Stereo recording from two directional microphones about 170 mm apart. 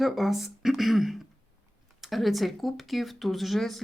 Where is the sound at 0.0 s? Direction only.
Centre (ahead or behind).